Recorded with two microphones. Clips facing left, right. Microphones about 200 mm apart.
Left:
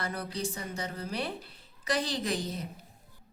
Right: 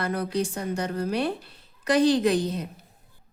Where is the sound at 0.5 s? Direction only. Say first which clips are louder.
Right 9 dB; 50° right (ahead or behind).